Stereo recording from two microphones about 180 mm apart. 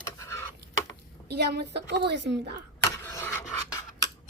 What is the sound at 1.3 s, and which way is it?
A woman's voice, 65° right (ahead or behind).